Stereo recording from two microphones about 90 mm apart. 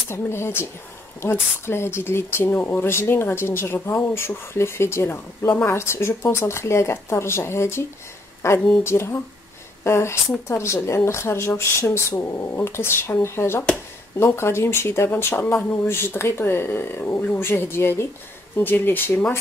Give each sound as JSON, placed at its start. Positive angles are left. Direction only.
{"t": 0.1, "sound": "speech", "side_deg": 30}